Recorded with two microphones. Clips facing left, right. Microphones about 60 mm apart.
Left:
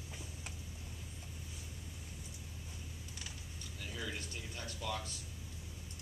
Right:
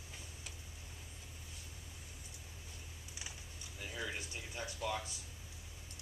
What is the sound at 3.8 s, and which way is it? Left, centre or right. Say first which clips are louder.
Speech: right 1 dB; centre.